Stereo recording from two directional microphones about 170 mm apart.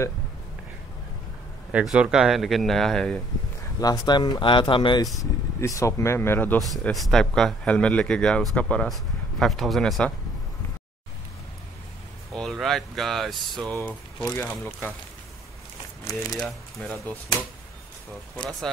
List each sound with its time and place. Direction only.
1.7 s speech: 5° right (ahead or behind)
3.8 s speech: 20° left (ahead or behind)
6.6 s speech: centre (ahead or behind)
12.3 s speech: centre (ahead or behind)
16.3 s speech: centre (ahead or behind)
18.4 s speech: centre (ahead or behind)